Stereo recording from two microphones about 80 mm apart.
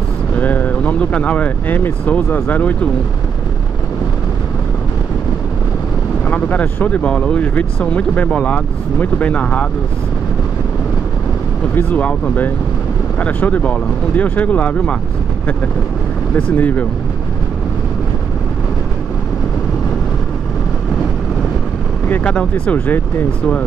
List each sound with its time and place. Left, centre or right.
0.4 s vehicle: left
1.8 s speech: left
6.2 s speech: centre
11.7 s speech: centre
16.3 s speech: left
22.1 s speech: centre